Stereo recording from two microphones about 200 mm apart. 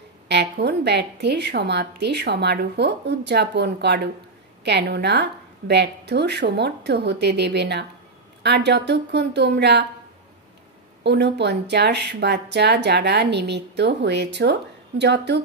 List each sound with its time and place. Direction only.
0.3 s a woman's voice: 55° right (ahead or behind)
11.1 s a woman's voice: 60° right (ahead or behind)